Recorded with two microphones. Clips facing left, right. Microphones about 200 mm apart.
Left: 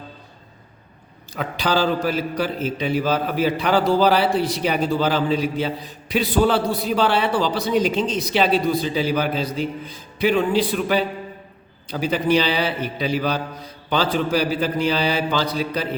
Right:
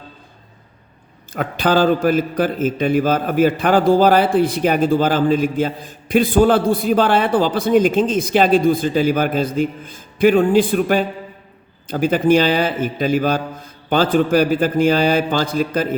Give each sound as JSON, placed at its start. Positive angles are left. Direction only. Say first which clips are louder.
{"t": 1.3, "sound": "a man's voice", "louder": "right 5 dB", "side_deg": -50}